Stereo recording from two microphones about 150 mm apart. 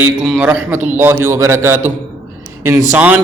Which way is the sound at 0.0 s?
10° right (ahead or behind).